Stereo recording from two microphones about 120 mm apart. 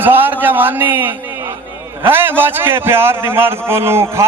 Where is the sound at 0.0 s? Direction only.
15° right (ahead or behind).